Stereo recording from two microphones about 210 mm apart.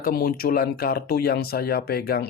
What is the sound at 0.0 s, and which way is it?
Speech, 45° left (ahead or behind).